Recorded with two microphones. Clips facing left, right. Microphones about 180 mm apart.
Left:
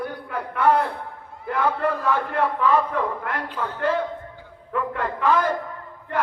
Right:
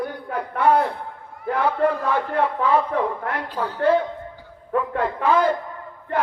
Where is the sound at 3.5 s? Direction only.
35° right (ahead or behind).